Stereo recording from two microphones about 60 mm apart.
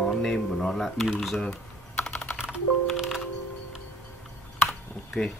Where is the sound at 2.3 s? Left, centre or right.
Centre.